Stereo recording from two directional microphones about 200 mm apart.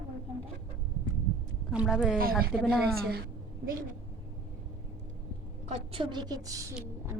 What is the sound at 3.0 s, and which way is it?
Speech, 50° right (ahead or behind).